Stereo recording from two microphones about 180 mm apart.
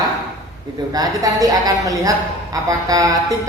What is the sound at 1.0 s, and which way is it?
A woman's voice, 20° right (ahead or behind).